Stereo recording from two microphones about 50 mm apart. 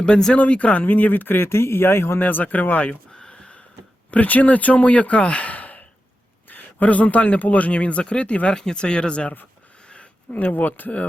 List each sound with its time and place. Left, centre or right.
0.0 s speech: centre
0.3 s speech: left
1.5 s speech: left
2.2 s speech: left
3.2 s a sound: centre
4.1 s speech: left
9.8 s a sound: left
10.3 s speech: left